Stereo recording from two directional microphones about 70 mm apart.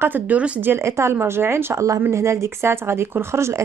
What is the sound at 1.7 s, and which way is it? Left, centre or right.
Speech, right.